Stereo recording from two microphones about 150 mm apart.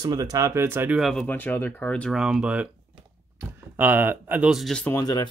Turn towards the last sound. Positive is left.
turn(degrees=25)  # may be behind; listen again after turning